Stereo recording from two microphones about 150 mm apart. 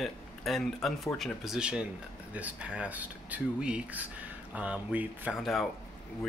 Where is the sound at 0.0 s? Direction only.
Centre (ahead or behind).